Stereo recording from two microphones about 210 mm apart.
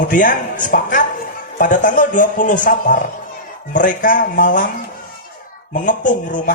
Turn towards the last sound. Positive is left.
turn(degrees=40)  # may be behind; listen again after turning